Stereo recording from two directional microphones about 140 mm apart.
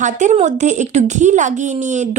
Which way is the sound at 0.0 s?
60° right (ahead or behind).